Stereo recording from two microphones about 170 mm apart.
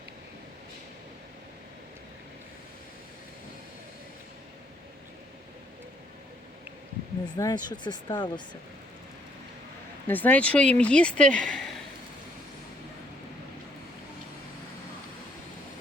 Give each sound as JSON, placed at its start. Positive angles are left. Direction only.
{"t": 7.3, "sound": "speech", "side_deg": 20}
{"t": 10.1, "sound": "speech", "side_deg": 10}